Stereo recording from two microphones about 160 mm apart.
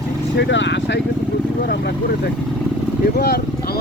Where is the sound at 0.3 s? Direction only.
90° left.